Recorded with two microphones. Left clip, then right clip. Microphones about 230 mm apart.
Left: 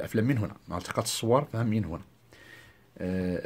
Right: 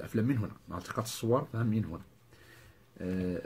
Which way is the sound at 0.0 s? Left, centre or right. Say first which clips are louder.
Left 4 dB; left.